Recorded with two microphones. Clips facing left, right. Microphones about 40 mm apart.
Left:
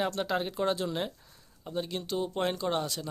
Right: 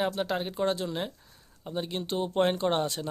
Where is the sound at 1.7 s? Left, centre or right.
Right.